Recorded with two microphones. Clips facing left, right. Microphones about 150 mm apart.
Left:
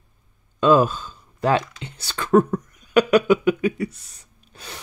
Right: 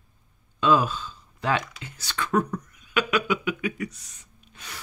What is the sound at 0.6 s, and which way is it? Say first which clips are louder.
Speech: left 5 dB; 45° left (ahead or behind).